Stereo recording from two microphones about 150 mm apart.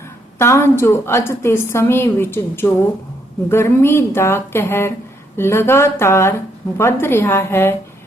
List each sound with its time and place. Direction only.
0.3 s a woman's voice: 15° left (ahead or behind)